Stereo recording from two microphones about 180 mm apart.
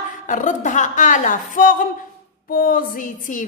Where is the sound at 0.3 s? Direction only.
45° left (ahead or behind).